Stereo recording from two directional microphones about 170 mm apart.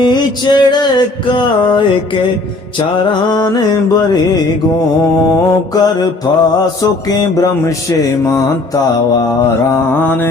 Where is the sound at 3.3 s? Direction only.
25° left (ahead or behind).